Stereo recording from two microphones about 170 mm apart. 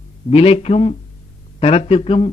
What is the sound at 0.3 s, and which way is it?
A man's voice, 35° left (ahead or behind).